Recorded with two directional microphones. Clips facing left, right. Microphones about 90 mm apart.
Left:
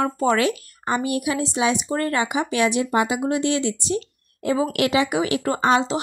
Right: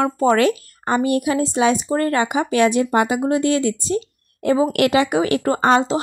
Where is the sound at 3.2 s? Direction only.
40° right (ahead or behind).